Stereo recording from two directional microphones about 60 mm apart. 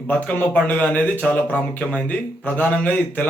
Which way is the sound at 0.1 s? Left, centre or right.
Left.